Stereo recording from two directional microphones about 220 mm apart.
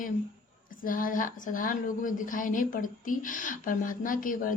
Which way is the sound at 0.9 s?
40° left (ahead or behind).